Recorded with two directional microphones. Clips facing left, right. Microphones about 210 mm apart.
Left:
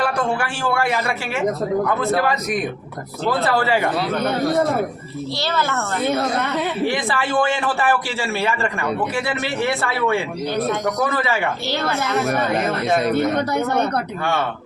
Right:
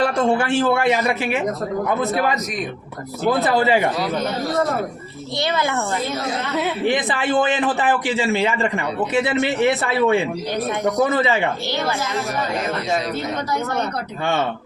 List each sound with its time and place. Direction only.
0.0 s a man's voice: 25° right (ahead or behind)
3.2 s speech: 20° right (ahead or behind)
5.4 s speech: 15° right (ahead or behind)
6.1 s speech: 60° left (ahead or behind)
6.8 s a man's voice: 20° right (ahead or behind)
11.9 s speech: 60° left (ahead or behind)